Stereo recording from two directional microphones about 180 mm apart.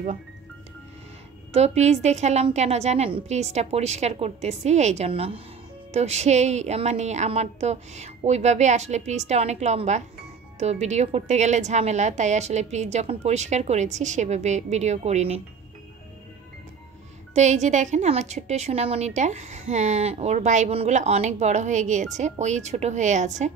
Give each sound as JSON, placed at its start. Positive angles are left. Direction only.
{"t": 1.5, "sound": "a woman's voice", "side_deg": -35}
{"t": 17.3, "sound": "a woman's voice", "side_deg": -40}